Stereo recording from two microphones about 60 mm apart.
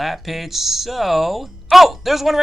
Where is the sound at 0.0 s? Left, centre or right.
Centre.